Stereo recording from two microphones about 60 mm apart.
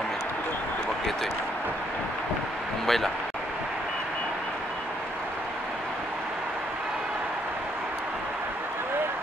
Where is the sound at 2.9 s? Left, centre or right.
Centre.